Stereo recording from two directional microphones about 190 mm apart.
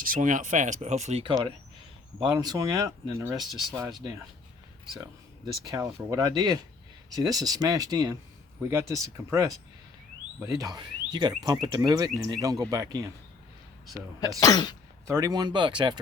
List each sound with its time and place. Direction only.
0.0 s speech: 45° right (ahead or behind); by 3.3 s 15° right (ahead or behind)
3.3 s speech: centre (ahead or behind)
5.7 s speech: 15° right (ahead or behind)
14.2 s speech: 20° left (ahead or behind)
15.0 s speech: 15° right (ahead or behind)